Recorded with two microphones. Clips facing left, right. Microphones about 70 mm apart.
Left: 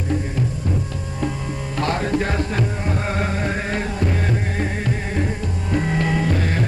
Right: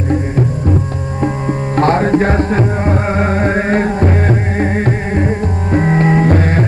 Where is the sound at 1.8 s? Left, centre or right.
Right.